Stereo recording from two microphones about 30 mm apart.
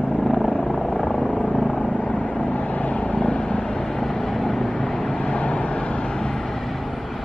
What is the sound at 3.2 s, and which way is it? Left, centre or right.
Vehicle, left.